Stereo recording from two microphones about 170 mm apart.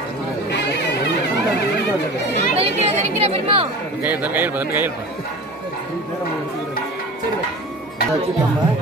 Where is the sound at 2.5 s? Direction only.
40° right (ahead or behind).